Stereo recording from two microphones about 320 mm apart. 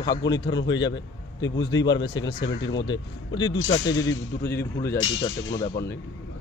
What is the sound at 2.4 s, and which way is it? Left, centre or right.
A man's voice, left.